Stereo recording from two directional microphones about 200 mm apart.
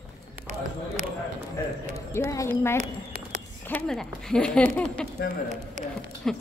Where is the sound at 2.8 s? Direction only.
45° right (ahead or behind).